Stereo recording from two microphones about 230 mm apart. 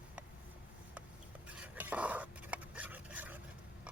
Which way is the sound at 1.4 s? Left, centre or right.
Centre.